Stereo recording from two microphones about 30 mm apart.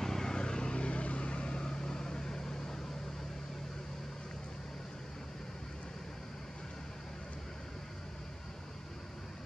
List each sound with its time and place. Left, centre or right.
0.0 s vehicle: centre